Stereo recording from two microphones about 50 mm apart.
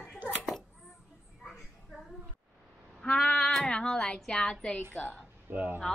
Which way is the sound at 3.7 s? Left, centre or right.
Centre.